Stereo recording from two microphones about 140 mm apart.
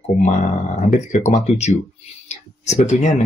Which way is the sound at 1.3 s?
50° left (ahead or behind).